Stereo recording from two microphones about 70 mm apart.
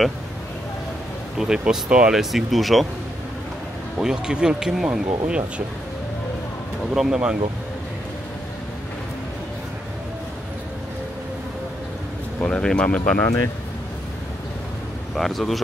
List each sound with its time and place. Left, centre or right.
1.4 s speech: centre
2.1 s speech: centre
4.0 s speech: centre
7.0 s speech: centre
12.4 s speech: centre
15.1 s speech: centre